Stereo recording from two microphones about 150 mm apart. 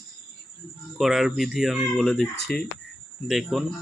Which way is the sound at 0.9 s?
Centre (ahead or behind).